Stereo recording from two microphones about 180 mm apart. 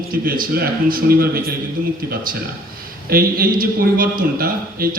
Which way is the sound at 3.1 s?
55° right (ahead or behind).